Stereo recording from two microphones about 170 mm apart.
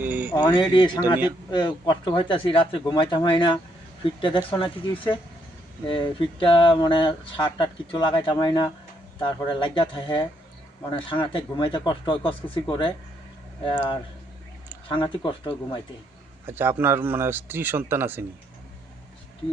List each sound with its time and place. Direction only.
0.0 s a sound: 10° right (ahead or behind)
0.3 s speech: 25° left (ahead or behind)
16.5 s speech: 10° right (ahead or behind)